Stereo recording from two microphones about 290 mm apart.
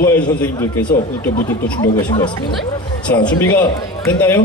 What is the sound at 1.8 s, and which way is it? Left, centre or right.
A man's voice, centre.